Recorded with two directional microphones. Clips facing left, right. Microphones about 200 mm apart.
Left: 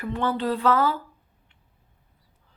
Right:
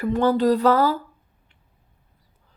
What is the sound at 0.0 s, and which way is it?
Speech, 40° right (ahead or behind).